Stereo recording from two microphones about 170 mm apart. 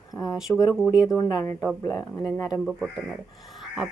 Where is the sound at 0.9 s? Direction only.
20° left (ahead or behind).